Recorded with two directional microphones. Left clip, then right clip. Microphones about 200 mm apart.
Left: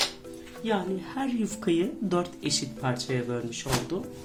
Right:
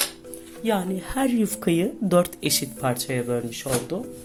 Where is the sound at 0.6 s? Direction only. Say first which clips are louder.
Right 4 dB; 45° right (ahead or behind).